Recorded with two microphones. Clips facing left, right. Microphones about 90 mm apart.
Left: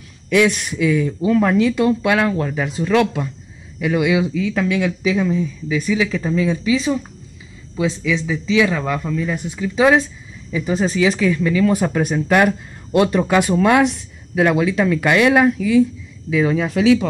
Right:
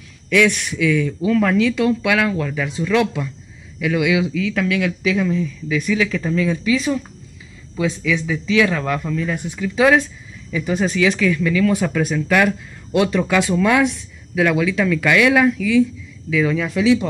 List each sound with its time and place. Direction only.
0.3 s speech: 25° left (ahead or behind)
1.8 s speech: 35° left (ahead or behind)
3.8 s speech: 35° left (ahead or behind)
8.0 s speech: 15° left (ahead or behind)
9.8 s speech: 20° left (ahead or behind)
12.4 s speech: 45° left (ahead or behind)